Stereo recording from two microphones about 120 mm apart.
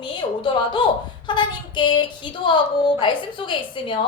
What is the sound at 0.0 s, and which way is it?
A woman's voice, 40° left (ahead or behind).